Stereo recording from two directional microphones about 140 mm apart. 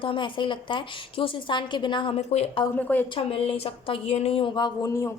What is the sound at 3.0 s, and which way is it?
A woman's voice, 40° left (ahead or behind).